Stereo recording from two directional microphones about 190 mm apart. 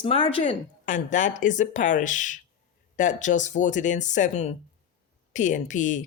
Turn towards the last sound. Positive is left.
turn(degrees=40)  # may be behind; listen again after turning